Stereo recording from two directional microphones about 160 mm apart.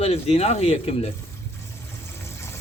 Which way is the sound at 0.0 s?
40° left (ahead or behind).